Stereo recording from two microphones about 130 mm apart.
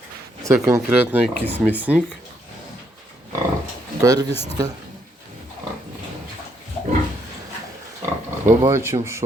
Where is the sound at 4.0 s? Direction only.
25° right (ahead or behind).